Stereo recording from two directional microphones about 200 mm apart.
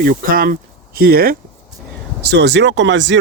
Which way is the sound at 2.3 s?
60° right (ahead or behind).